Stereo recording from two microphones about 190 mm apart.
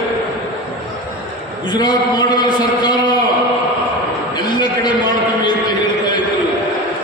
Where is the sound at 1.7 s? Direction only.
20° left (ahead or behind).